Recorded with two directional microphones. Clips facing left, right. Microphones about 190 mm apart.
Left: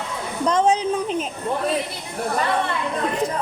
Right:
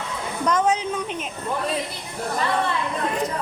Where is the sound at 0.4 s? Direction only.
30° left (ahead or behind).